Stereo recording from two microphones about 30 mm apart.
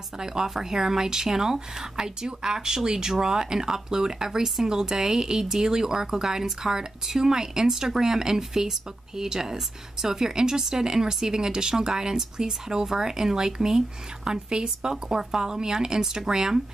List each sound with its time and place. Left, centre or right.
0.2 s speech: centre